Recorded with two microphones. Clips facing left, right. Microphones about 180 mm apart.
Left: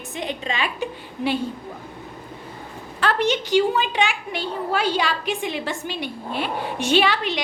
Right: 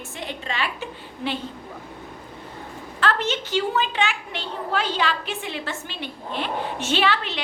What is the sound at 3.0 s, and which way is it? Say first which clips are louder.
A woman's voice: left 3 dB; 15° left (ahead or behind).